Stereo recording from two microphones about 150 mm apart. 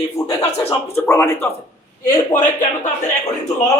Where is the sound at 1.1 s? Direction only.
15° left (ahead or behind).